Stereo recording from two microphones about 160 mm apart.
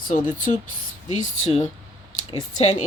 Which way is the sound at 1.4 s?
40° left (ahead or behind).